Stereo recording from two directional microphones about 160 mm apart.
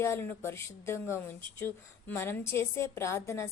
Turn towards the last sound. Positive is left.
turn(degrees=15)  # may be behind; listen again after turning